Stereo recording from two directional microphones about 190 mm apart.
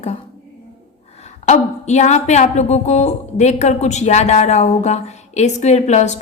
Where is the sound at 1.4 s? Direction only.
35° left (ahead or behind).